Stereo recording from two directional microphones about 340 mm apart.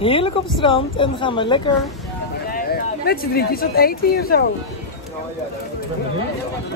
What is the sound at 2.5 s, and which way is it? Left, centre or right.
Speech, left.